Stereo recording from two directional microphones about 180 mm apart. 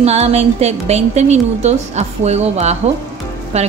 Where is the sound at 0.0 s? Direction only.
35° right (ahead or behind).